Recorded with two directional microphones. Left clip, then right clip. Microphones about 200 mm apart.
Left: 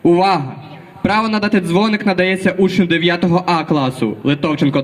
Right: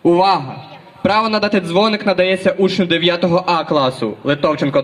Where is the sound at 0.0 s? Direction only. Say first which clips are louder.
Even; 30° left (ahead or behind).